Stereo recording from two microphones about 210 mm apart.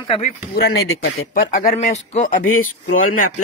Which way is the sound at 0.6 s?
50° left (ahead or behind).